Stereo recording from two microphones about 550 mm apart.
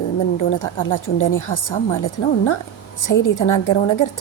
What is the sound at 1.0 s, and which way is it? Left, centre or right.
A woman's voice, left.